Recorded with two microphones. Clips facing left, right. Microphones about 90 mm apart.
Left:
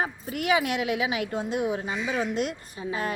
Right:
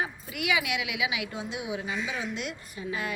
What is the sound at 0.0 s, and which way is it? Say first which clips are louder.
Speech: left 4 dB; 40° left (ahead or behind).